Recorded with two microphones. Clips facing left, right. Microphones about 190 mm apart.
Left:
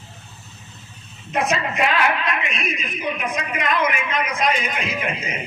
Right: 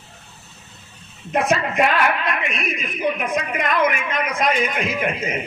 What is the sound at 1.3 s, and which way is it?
A woman's voice, 50° right (ahead or behind).